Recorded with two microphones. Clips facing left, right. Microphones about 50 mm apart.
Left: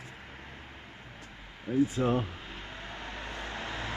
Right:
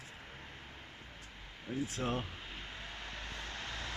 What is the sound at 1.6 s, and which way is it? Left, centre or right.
Vehicle, centre.